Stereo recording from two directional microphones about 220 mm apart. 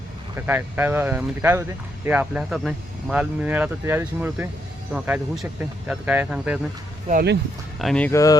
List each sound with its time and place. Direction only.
0.3 s speech: 10° right (ahead or behind)
7.1 s speech: 40° right (ahead or behind)
7.8 s speech: 5° left (ahead or behind)